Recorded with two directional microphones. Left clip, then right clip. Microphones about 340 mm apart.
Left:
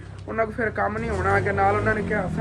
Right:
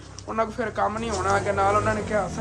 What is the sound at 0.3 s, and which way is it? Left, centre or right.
Speech, centre.